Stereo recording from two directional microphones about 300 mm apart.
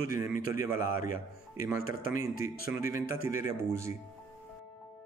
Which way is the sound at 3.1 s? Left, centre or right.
Left.